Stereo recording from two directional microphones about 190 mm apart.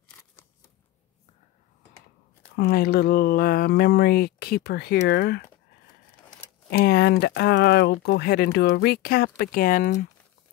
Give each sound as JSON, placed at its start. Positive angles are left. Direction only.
{"t": 2.5, "sound": "speech", "side_deg": 55}
{"t": 6.8, "sound": "speech", "side_deg": 55}